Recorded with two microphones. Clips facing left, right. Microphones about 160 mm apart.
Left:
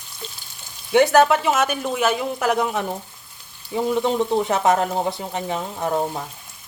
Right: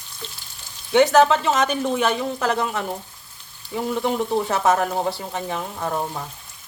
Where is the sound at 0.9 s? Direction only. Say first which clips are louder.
Even; 10° left (ahead or behind).